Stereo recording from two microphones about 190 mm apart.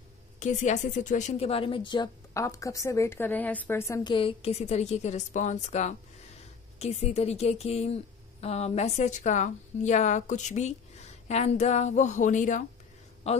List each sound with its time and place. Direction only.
0.4 s a woman's voice: 40° left (ahead or behind); by 4.1 s 15° left (ahead or behind)
4.1 s speech: 30° left (ahead or behind)